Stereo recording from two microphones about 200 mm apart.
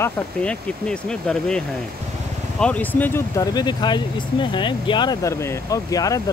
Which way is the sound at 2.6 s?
10° left (ahead or behind).